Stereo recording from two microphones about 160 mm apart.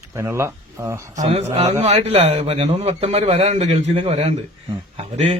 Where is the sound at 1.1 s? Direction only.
45° right (ahead or behind).